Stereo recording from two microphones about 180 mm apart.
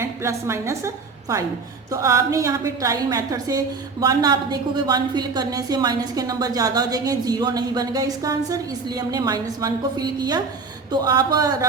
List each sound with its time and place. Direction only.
0.0 s a woman's voice: 15° right (ahead or behind)
1.9 s a woman's voice: 15° right (ahead or behind)